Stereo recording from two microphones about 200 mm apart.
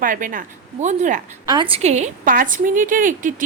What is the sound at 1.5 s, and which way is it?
A woman's voice, 25° right (ahead or behind).